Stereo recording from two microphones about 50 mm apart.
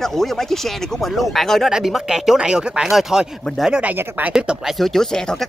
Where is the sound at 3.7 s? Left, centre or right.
Right.